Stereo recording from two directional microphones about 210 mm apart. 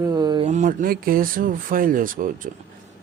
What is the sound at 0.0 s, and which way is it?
A man's voice, 20° right (ahead or behind).